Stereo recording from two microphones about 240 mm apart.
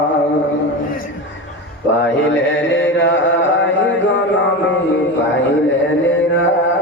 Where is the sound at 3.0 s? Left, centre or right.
Left.